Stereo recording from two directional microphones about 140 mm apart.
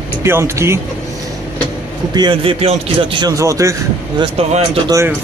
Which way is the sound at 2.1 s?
35° right (ahead or behind).